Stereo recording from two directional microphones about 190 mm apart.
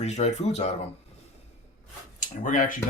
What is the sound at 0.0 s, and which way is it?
Speech, 35° left (ahead or behind).